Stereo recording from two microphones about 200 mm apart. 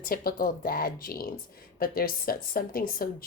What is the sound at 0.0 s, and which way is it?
A woman's voice, 45° left (ahead or behind).